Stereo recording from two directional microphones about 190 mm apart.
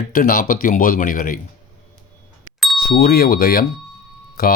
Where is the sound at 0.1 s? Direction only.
50° left (ahead or behind).